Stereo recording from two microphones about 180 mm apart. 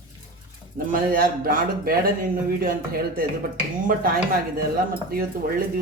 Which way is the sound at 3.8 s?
50° right (ahead or behind).